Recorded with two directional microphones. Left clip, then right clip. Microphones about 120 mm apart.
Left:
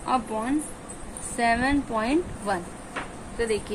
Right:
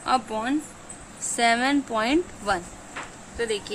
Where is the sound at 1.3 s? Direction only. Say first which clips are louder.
Right 2 dB; 65° right (ahead or behind).